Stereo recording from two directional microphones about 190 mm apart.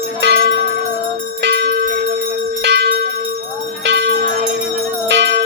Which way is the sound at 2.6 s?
60° right (ahead or behind).